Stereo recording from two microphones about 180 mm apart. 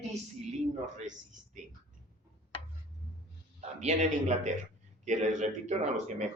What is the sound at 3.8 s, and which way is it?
Speech, 40° right (ahead or behind).